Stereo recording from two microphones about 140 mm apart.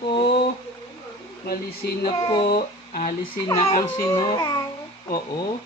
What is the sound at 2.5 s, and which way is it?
Speech, 90° left.